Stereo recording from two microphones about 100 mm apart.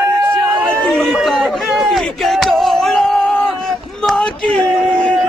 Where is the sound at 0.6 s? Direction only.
5° left (ahead or behind).